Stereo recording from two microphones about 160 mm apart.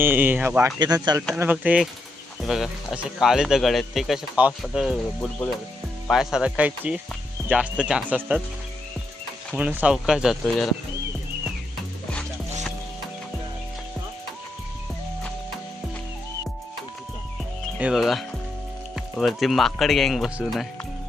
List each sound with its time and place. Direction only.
0.0 s speech: 10° right (ahead or behind)
0.8 s speech: 25° right (ahead or behind)
1.4 s speech: 10° right (ahead or behind)
9.6 s speech: 10° right (ahead or behind)
17.7 s speech: 5° right (ahead or behind)